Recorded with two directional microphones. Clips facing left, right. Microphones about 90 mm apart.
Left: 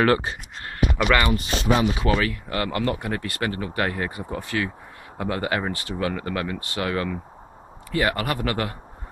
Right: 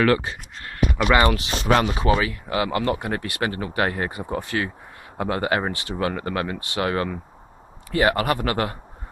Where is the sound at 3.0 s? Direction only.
30° right (ahead or behind).